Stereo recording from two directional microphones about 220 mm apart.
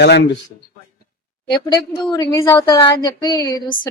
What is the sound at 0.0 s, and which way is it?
Speech, 50° left (ahead or behind).